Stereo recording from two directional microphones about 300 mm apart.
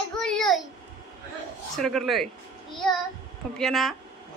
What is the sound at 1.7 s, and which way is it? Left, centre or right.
A child's voice, centre.